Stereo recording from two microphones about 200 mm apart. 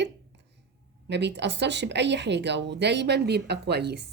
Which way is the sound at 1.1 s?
60° right (ahead or behind).